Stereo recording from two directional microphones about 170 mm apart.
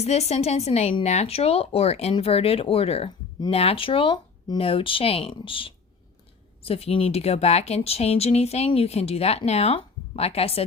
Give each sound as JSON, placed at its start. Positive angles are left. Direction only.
{"t": 0.0, "sound": "speech", "side_deg": 40}